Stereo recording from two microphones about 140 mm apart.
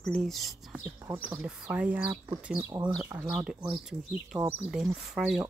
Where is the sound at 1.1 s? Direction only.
10° right (ahead or behind).